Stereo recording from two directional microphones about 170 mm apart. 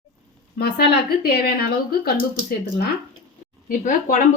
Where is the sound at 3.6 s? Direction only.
55° left (ahead or behind).